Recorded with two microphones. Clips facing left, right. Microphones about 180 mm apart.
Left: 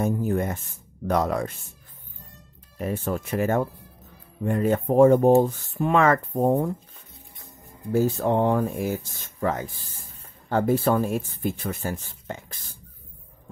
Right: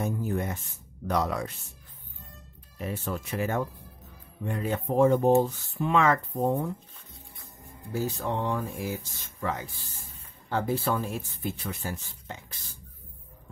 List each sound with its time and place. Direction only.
0.0 s speech: 50° left (ahead or behind)
2.8 s speech: 50° left (ahead or behind)
7.9 s speech: 50° left (ahead or behind)